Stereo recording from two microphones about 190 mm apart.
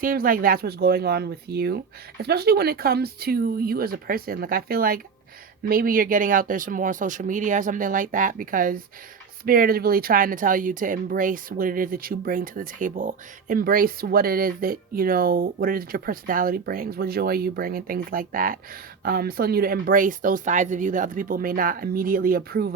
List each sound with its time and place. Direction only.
0.0 s speech: 50° right (ahead or behind)